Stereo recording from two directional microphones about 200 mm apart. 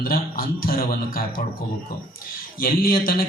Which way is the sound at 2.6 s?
45° left (ahead or behind).